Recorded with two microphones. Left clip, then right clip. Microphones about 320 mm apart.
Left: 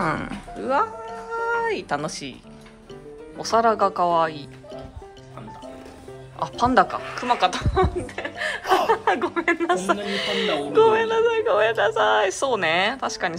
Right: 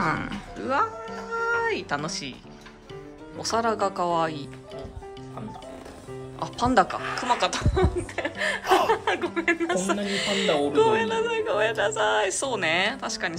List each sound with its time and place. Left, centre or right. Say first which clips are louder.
0.0 s speech: left 1 dB; centre
3.3 s speech: left 6 dB; centre
6.4 s speech: left 3 dB; centre